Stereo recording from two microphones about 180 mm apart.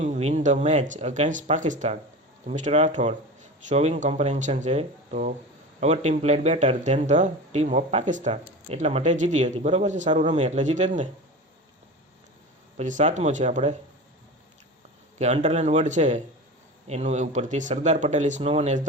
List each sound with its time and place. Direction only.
0.0 s speech: 40° right (ahead or behind)
12.7 s speech: 45° right (ahead or behind)
15.2 s speech: 40° right (ahead or behind)